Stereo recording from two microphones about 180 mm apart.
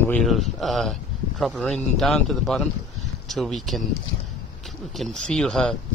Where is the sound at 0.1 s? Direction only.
Centre (ahead or behind).